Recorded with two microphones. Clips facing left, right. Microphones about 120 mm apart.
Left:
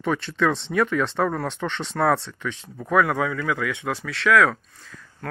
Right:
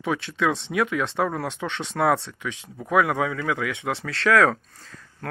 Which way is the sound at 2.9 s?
20° right (ahead or behind).